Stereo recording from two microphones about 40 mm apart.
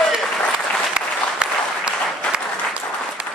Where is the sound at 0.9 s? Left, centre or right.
Right.